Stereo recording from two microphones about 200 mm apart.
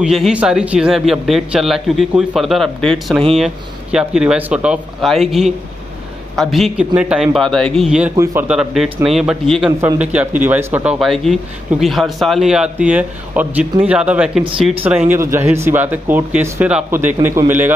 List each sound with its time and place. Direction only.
0.0 s a man's voice: 5° right (ahead or behind)
8.2 s speech: 15° right (ahead or behind)
8.5 s a man's voice: 5° right (ahead or behind)